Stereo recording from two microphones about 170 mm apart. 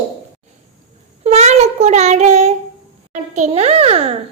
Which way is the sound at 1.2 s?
40° right (ahead or behind).